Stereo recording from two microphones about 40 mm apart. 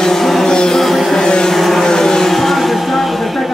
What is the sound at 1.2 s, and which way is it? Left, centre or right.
Vehicle, centre.